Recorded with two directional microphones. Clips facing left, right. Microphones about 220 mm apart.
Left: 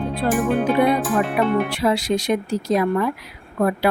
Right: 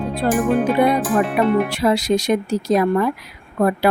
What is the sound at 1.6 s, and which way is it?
A woman's voice, 40° right (ahead or behind).